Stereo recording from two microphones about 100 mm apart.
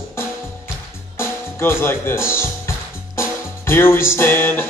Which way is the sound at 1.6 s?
25° left (ahead or behind).